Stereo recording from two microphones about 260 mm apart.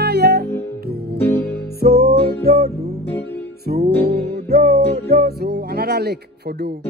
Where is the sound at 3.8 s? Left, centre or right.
Right.